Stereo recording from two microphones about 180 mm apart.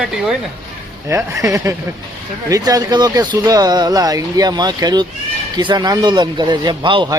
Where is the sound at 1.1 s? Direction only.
15° right (ahead or behind).